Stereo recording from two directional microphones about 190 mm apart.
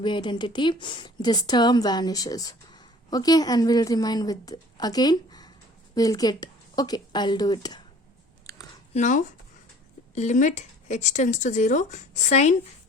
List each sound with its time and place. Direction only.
0.0 s a woman's voice: 25° left (ahead or behind)
8.5 s a sound: 15° left (ahead or behind)
8.9 s speech: 40° left (ahead or behind)